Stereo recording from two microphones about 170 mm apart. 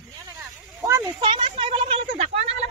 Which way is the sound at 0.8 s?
25° right (ahead or behind).